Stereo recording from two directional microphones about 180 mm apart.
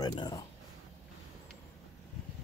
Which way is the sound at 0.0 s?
25° left (ahead or behind).